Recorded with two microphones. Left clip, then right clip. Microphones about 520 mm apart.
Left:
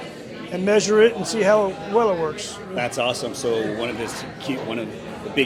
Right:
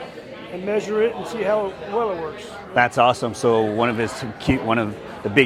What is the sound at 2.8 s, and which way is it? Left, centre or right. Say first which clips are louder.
A man's voice: right 7 dB; right.